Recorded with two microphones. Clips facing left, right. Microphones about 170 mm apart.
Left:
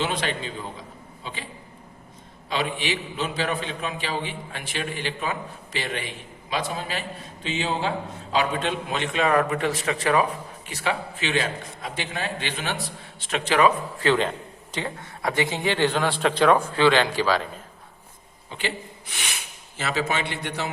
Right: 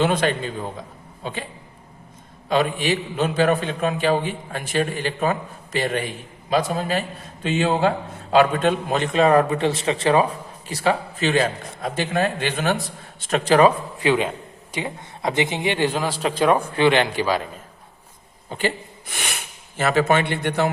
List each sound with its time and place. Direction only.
0.0 s a man's voice: 50° right (ahead or behind)
2.5 s a man's voice: 45° right (ahead or behind)
14.0 s a man's voice: 10° right (ahead or behind)
18.4 s speech: 45° right (ahead or behind)